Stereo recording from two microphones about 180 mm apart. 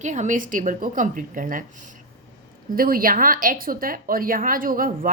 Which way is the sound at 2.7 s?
55° right (ahead or behind).